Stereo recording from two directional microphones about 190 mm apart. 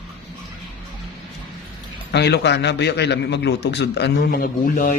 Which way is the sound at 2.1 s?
60° left (ahead or behind).